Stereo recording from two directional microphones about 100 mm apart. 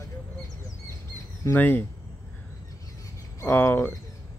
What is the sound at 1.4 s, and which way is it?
Speech, 20° left (ahead or behind).